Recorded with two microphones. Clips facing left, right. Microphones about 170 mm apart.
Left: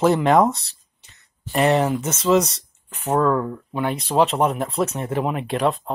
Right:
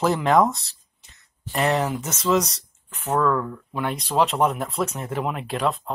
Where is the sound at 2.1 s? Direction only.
30° left (ahead or behind).